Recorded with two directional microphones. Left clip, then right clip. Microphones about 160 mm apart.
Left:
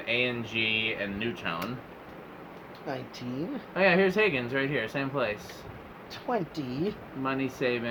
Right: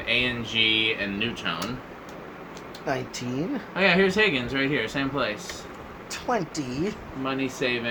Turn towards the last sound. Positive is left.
turn(degrees=45)  # may be behind; listen again after turning